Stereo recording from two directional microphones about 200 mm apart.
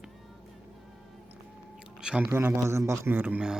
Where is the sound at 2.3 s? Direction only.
10° right (ahead or behind).